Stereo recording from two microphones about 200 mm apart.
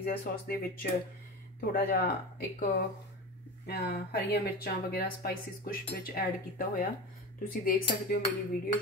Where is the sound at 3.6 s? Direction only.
50° left (ahead or behind).